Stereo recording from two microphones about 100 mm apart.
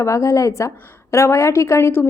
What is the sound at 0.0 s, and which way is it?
A woman's voice, 30° left (ahead or behind).